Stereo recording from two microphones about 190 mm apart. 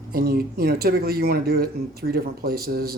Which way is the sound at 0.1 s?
50° right (ahead or behind).